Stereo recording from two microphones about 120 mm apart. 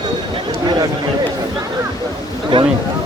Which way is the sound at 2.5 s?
45° right (ahead or behind).